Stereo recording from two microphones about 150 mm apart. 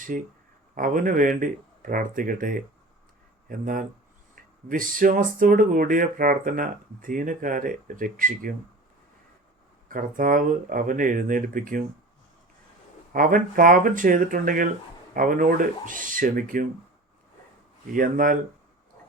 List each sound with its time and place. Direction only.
0.1 s speech: 60° right (ahead or behind)
9.9 s speech: 65° right (ahead or behind)
13.1 s speech: 65° right (ahead or behind)
17.9 s speech: 65° right (ahead or behind)